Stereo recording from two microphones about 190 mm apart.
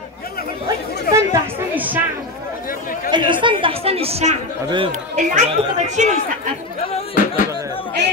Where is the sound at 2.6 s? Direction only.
50° left (ahead or behind).